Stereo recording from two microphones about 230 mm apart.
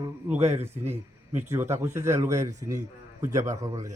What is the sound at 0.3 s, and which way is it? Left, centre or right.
A man's voice, centre.